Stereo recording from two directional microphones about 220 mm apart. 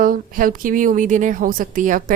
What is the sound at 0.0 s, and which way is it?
A woman's voice, 40° right (ahead or behind).